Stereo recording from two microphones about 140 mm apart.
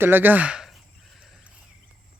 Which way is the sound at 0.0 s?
15° right (ahead or behind).